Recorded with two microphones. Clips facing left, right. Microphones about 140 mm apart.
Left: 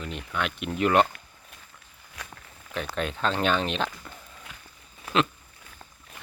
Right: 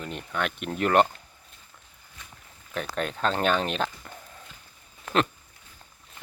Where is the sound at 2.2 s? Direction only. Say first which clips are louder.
Left 7 dB; 75° left (ahead or behind).